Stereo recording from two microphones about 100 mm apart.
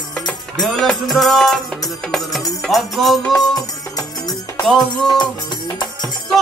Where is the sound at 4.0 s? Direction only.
35° left (ahead or behind).